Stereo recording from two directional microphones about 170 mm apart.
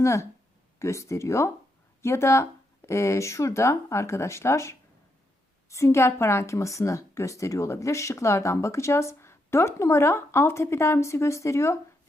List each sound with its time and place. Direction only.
0.0 s a woman's voice: 15° left (ahead or behind)